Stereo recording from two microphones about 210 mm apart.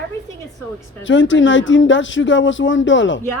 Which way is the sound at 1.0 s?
65° left (ahead or behind).